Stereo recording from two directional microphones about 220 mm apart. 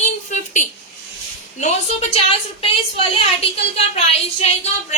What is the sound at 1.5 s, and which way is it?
A woman's voice, 30° left (ahead or behind).